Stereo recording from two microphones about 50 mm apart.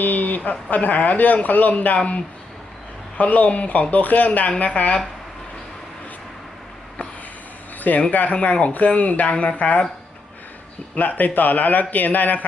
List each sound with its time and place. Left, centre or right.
0.0 s speech: left
3.2 s speech: left
7.8 s speech: left
10.9 s speech: left